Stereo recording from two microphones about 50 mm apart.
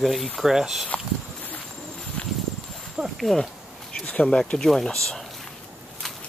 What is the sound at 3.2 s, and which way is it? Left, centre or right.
Speech, centre.